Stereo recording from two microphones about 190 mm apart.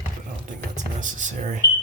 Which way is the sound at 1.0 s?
40° right (ahead or behind).